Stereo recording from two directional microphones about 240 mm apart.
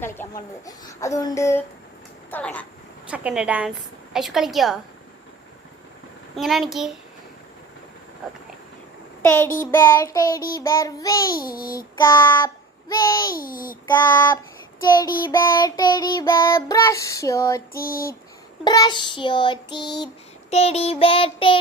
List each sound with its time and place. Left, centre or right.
0.0 s babbling: centre
0.6 s child singing: centre
2.3 s a woman's voice: centre
3.1 s a woman's voice: centre
6.3 s a woman's voice: centre
9.2 s child singing: centre
11.3 s a child's voice: left
12.0 s child singing: centre
13.3 s a child's voice: left
13.8 s child singing: centre
17.7 s a child's voice: left
18.6 s child singing: centre